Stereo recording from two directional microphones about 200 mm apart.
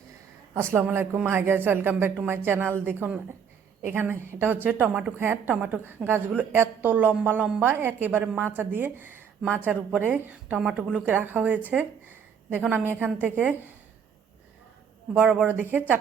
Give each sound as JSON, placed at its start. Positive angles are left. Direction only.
{"t": 0.5, "sound": "a woman's voice", "side_deg": -10}
{"t": 15.1, "sound": "a woman's voice", "side_deg": -5}